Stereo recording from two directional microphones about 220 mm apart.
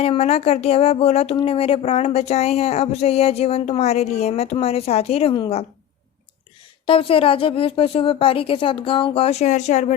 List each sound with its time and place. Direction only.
0.0 s speech: 30° left (ahead or behind)
6.8 s speech: 25° left (ahead or behind)